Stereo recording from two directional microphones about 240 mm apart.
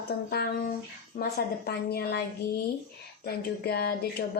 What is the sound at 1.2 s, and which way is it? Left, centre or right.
A woman's voice, left.